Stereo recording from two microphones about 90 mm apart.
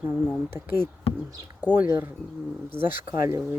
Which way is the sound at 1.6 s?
20° right (ahead or behind).